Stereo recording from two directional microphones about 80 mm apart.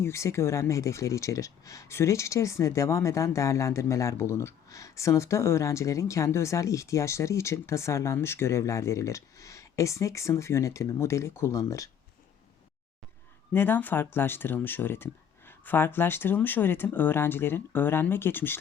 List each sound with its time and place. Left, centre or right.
0.0 s speech: left
13.5 s speech: left